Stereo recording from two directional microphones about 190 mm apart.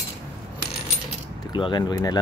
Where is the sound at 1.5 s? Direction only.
25° left (ahead or behind).